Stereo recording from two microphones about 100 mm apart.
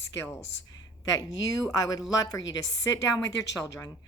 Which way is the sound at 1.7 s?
40° left (ahead or behind).